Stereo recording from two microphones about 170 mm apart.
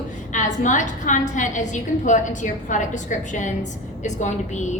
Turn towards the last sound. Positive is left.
turn(degrees=45)  # may be behind; listen again after turning